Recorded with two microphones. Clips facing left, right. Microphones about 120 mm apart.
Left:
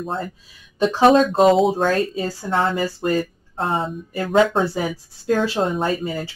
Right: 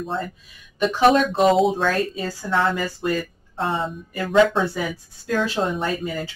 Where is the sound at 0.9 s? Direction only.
30° left (ahead or behind).